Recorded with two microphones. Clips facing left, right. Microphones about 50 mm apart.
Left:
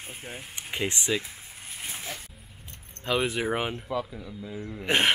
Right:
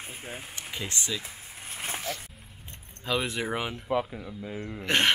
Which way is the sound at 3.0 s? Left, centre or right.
Centre.